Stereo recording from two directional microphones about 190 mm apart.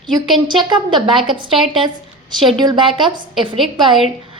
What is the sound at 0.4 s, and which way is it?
Speech, 25° right (ahead or behind).